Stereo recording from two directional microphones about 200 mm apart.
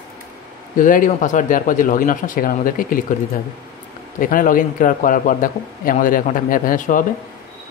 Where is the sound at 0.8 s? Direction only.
40° left (ahead or behind).